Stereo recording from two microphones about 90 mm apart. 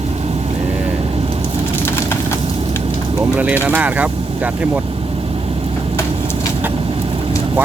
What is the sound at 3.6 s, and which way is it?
Speech, 15° right (ahead or behind).